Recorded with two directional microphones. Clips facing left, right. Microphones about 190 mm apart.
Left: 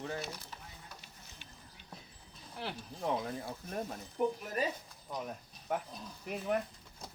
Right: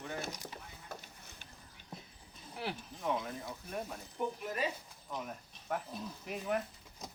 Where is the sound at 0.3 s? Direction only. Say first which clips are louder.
Right 2 dB; 15° right (ahead or behind).